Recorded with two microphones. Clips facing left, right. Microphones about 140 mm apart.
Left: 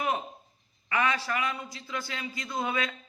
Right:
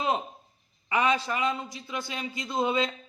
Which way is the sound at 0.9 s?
20° right (ahead or behind).